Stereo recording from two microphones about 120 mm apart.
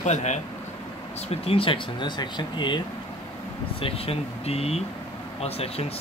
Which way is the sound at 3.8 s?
55° left (ahead or behind).